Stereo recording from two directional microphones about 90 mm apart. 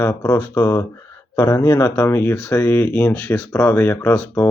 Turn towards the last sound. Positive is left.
turn(degrees=30)  # may be behind; listen again after turning